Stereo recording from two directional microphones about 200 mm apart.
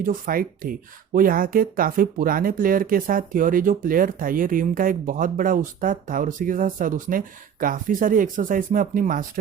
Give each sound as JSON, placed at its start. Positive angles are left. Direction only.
{"t": 0.0, "sound": "speech", "side_deg": -45}